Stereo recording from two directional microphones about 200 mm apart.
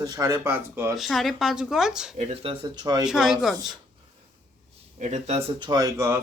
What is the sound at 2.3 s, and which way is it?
Speech, 30° right (ahead or behind).